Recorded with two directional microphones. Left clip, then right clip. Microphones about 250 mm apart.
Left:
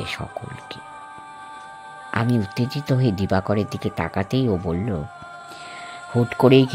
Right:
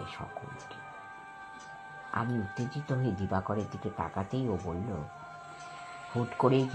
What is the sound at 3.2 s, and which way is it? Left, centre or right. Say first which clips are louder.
Speech: left 11 dB; left.